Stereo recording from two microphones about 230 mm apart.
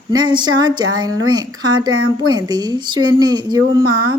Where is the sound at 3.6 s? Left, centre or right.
Right.